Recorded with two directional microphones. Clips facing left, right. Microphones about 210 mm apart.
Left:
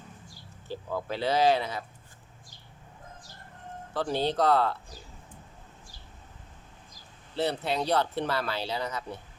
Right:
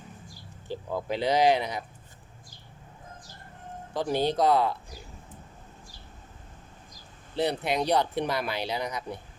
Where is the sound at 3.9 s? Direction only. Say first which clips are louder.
Right 2 dB; 15° right (ahead or behind).